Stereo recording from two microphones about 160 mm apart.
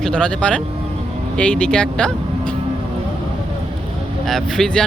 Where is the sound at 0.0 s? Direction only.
5° left (ahead or behind).